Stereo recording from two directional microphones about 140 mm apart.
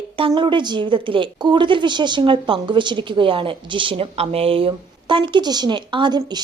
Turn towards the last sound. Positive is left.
turn(degrees=-30)  # may be behind; listen again after turning